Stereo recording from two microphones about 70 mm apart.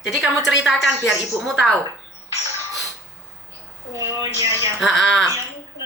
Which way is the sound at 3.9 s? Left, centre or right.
Right.